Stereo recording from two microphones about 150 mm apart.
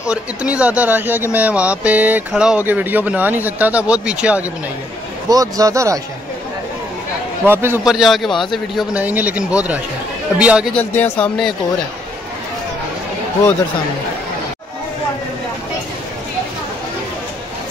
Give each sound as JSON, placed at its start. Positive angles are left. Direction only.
{"t": 0.0, "sound": "speech", "side_deg": -5}
{"t": 5.3, "sound": "speech", "side_deg": -25}
{"t": 7.4, "sound": "speech", "side_deg": -15}
{"t": 7.8, "sound": "a man's voice", "side_deg": 0}
{"t": 10.7, "sound": "speech", "side_deg": 10}
{"t": 11.1, "sound": "a man's voice", "side_deg": 0}